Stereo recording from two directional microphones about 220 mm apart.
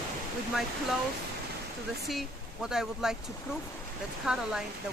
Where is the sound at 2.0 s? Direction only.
Centre (ahead or behind).